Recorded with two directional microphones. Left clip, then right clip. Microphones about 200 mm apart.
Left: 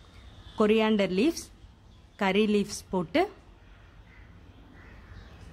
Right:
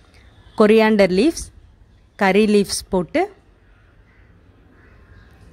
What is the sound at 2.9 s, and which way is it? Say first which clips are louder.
Speech: right 5 dB; 20° right (ahead or behind).